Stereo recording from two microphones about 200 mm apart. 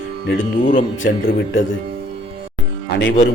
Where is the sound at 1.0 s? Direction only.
65° left (ahead or behind).